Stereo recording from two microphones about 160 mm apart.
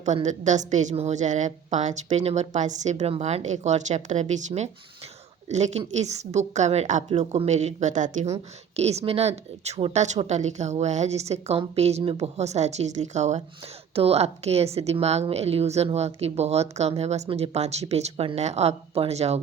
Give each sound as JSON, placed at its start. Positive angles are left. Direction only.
{"t": 0.3, "sound": "a woman's voice", "side_deg": -50}